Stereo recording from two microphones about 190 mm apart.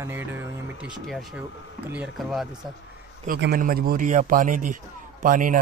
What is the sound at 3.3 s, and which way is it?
A man's voice, 55° right (ahead or behind).